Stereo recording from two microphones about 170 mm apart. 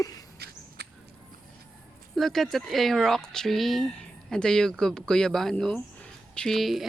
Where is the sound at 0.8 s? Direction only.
70° right (ahead or behind).